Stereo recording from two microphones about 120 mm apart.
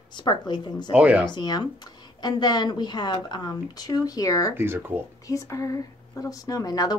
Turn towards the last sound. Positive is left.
turn(degrees=30)  # may be behind; listen again after turning